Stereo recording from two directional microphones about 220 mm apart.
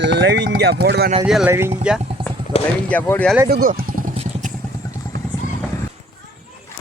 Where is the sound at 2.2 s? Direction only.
25° right (ahead or behind).